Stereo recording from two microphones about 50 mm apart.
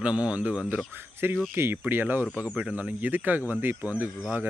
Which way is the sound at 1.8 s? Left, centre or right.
Right.